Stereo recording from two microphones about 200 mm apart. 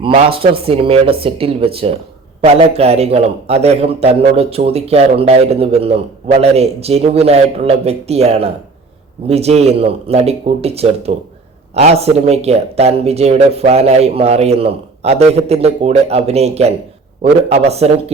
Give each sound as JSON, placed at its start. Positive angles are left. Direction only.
{"t": 0.0, "sound": "a man's voice", "side_deg": -25}